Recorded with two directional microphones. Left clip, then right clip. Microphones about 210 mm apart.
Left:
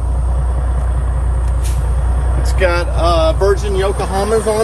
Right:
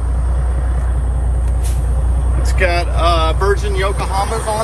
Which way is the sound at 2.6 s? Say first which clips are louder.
Left 1 dB; 20° left (ahead or behind).